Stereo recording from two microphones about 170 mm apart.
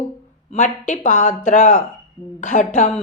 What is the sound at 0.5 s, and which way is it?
Speech, 45° left (ahead or behind).